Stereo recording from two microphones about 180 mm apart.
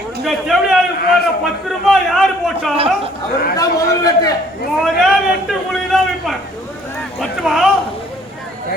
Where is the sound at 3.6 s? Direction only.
20° left (ahead or behind).